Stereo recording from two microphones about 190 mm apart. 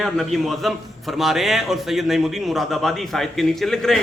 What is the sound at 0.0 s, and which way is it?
A man's voice, centre (ahead or behind).